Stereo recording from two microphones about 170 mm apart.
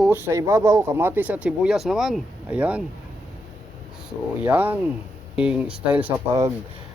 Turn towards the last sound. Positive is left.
turn(degrees=-10)  # may be behind; listen again after turning